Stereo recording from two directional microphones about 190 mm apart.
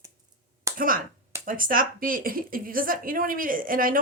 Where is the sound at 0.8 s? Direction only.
50° right (ahead or behind).